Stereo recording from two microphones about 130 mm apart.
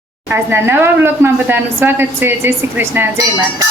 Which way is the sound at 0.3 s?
20° right (ahead or behind).